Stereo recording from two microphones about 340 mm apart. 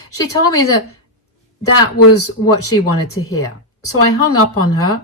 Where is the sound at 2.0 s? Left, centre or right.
Left.